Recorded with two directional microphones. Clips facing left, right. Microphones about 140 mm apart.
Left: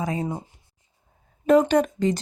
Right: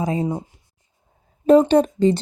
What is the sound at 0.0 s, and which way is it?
Speech, 25° right (ahead or behind).